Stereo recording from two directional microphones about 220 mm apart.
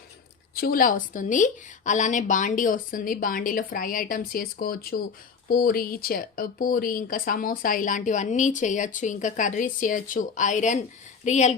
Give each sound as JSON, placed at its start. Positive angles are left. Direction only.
{"t": 0.5, "sound": "speech", "side_deg": 40}